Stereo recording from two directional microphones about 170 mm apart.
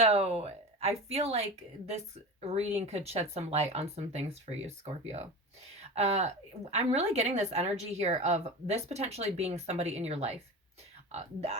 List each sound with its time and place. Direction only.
0.0 s a woman's voice: 35° right (ahead or behind)
5.8 s a woman's voice: 40° right (ahead or behind)